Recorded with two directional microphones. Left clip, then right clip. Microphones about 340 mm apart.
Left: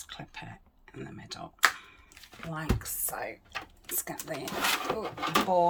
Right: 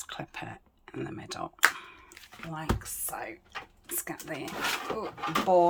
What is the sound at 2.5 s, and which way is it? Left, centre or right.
Speech, centre.